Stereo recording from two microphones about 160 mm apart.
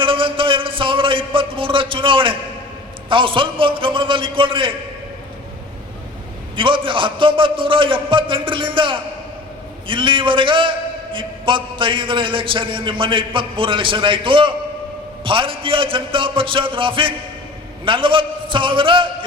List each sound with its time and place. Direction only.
0.0 s a sound: 35° right (ahead or behind)
3.1 s a man's voice: 30° right (ahead or behind)
6.6 s a man's voice: 30° right (ahead or behind)